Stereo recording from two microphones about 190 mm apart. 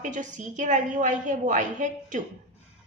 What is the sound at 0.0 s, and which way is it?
A woman's voice, 40° right (ahead or behind).